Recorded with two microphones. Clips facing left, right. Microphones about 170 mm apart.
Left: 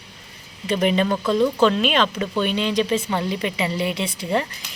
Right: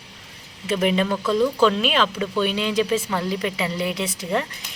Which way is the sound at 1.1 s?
20° left (ahead or behind).